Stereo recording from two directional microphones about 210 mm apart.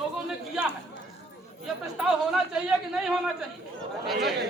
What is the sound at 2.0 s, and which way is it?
A man's voice, centre (ahead or behind).